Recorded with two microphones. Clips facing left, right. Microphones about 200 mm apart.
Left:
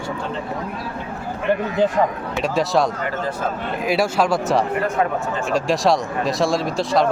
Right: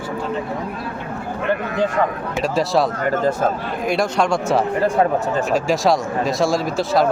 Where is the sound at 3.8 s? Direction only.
5° left (ahead or behind).